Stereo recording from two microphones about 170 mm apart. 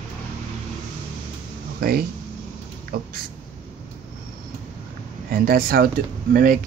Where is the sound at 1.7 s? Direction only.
65° right (ahead or behind).